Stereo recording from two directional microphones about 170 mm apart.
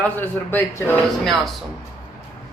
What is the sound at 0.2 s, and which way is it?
Speech, 10° left (ahead or behind).